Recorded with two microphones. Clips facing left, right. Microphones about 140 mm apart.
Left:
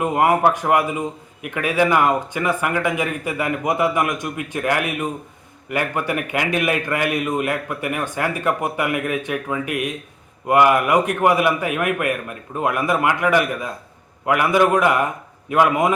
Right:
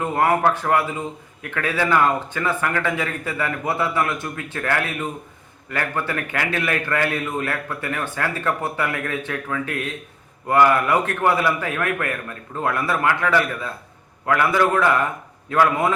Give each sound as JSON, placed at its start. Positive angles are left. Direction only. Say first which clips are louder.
{"t": 0.0, "sound": "a man's voice", "louder": "left 2 dB", "side_deg": 15}